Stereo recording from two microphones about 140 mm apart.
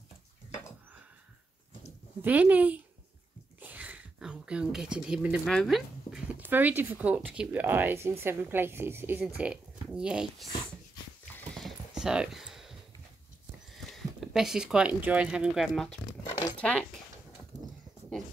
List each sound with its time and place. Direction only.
2.2 s speech: 10° right (ahead or behind)
3.6 s a sound: 10° right (ahead or behind)
5.4 s speech: centre (ahead or behind)
11.5 s clip-clop: centre (ahead or behind)
13.7 s speech: centre (ahead or behind)